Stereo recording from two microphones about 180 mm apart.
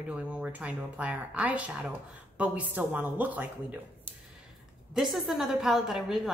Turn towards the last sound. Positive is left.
turn(degrees=0)  # may be behind; listen again after turning